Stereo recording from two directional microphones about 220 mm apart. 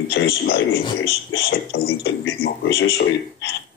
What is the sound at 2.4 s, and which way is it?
Speech, 45° left (ahead or behind).